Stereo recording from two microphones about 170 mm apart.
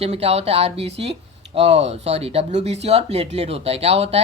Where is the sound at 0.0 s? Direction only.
35° right (ahead or behind).